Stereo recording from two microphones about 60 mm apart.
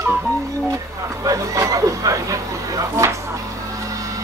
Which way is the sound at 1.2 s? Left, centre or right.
Right.